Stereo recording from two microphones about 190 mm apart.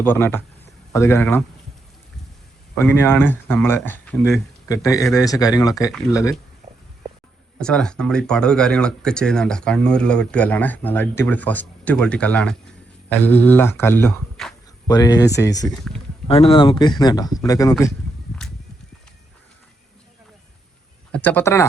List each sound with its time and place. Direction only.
0.0 s speech: 10° left (ahead or behind)
2.7 s speech: 15° left (ahead or behind)
7.6 s speech: 5° left (ahead or behind)
14.8 s speech: 20° left (ahead or behind)
15.6 s speech: centre (ahead or behind)
16.2 s speech: 30° left (ahead or behind)
21.1 s speech: 10° left (ahead or behind)